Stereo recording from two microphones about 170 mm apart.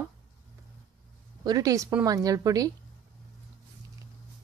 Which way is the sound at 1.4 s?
20° right (ahead or behind).